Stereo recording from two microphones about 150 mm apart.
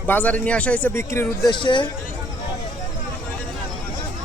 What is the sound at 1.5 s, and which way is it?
Speech, 30° left (ahead or behind).